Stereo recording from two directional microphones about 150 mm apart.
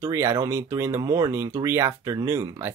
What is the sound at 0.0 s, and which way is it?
Speech, 20° right (ahead or behind).